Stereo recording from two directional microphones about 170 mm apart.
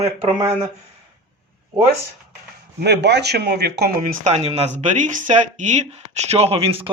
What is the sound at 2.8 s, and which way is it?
Speech, 80° right.